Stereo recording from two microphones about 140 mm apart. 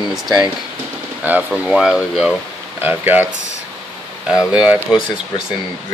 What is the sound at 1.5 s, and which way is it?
Speech, 5° right (ahead or behind).